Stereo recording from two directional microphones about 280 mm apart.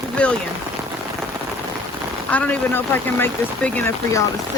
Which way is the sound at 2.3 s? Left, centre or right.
Centre.